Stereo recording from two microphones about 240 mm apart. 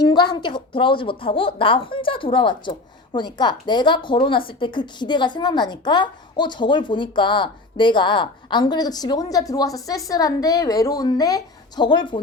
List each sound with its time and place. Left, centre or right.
0.0 s a woman's voice: centre